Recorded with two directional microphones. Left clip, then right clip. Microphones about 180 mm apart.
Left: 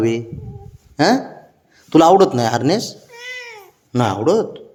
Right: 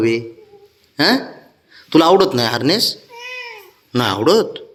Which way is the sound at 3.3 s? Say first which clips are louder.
Right 1 dB; 30° left (ahead or behind).